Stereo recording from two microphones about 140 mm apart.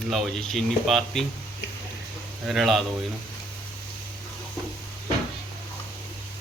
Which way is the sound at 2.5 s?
Centre (ahead or behind).